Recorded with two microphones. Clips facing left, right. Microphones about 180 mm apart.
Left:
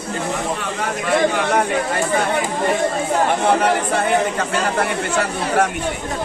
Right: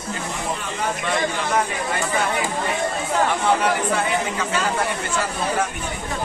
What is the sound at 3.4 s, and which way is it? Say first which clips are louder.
Speech: left 3 dB; 50° left (ahead or behind).